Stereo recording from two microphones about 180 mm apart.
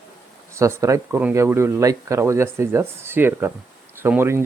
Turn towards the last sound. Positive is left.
turn(degrees=-15)  # may be behind; listen again after turning